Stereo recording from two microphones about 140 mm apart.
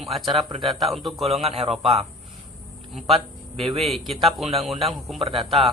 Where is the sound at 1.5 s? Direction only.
45° right (ahead or behind).